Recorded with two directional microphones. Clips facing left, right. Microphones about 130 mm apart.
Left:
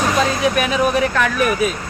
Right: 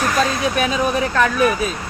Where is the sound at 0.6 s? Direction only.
30° right (ahead or behind).